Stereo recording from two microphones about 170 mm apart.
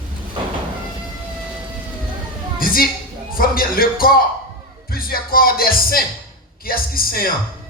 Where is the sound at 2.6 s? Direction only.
60° left (ahead or behind).